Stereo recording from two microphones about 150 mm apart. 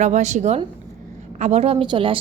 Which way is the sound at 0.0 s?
50° right (ahead or behind).